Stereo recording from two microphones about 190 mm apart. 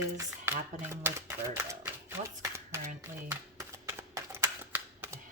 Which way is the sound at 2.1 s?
15° right (ahead or behind).